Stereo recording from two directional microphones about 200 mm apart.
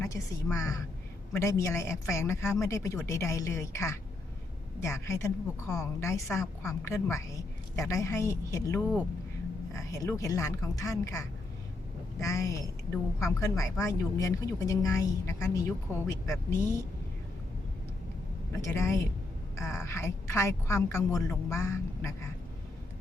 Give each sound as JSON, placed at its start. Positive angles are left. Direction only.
{"t": 0.0, "sound": "a woman's voice", "side_deg": 15}
{"t": 18.6, "sound": "a woman's voice", "side_deg": 15}